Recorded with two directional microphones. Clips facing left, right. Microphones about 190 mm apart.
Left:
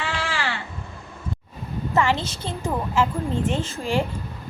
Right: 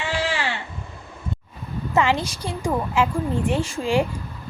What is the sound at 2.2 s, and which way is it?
A woman's voice, 10° right (ahead or behind).